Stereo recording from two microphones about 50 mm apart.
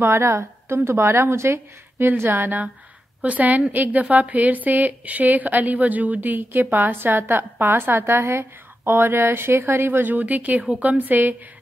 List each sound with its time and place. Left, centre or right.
0.0 s a woman's voice: right
3.2 s speech: right
10.1 s speech: right